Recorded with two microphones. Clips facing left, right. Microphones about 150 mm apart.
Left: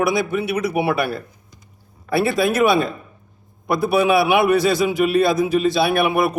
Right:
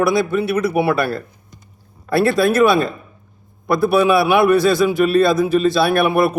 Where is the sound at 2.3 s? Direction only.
20° left (ahead or behind).